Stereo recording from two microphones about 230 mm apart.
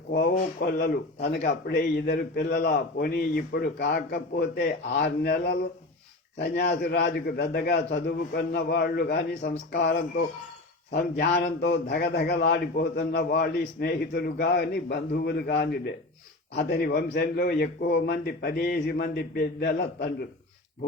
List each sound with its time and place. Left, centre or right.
0.6 s a man's voice: left